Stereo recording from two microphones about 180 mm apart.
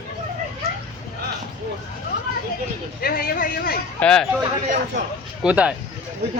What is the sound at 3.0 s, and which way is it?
Speech, 55° left (ahead or behind).